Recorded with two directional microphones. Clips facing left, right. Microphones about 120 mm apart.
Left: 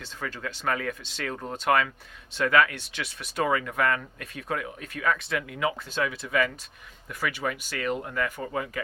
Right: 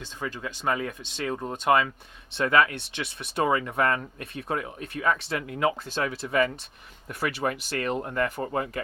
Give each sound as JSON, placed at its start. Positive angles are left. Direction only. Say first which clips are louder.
{"t": 0.0, "sound": "speech", "louder": "right 1 dB", "side_deg": -20}